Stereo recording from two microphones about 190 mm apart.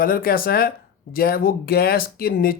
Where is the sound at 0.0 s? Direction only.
50° left (ahead or behind).